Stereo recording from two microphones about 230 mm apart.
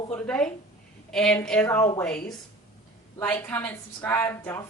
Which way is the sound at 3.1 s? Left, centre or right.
Centre.